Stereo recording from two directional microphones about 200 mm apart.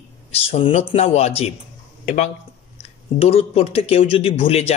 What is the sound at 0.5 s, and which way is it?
Speech, 30° left (ahead or behind).